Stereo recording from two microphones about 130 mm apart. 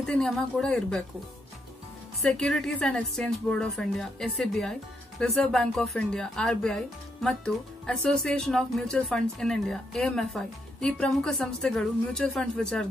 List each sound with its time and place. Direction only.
0.0 s speech: 5° left (ahead or behind)
2.2 s speech: 5° left (ahead or behind)